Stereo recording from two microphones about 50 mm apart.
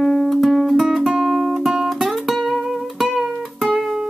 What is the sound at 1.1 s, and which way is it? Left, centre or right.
Guitar, centre.